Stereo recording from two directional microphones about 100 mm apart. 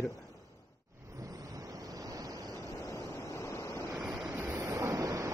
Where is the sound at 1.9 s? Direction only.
35° right (ahead or behind).